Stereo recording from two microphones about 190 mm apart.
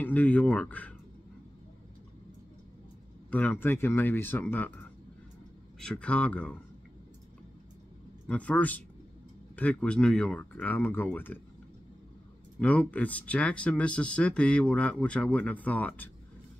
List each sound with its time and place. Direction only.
0.0 s speech: 10° left (ahead or behind)
3.3 s speech: 10° left (ahead or behind)
5.8 s speech: 5° left (ahead or behind)
8.3 s speech: 5° left (ahead or behind)
12.5 s speech: 5° left (ahead or behind)